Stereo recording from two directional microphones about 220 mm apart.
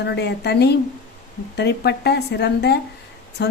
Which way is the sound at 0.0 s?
50° left (ahead or behind).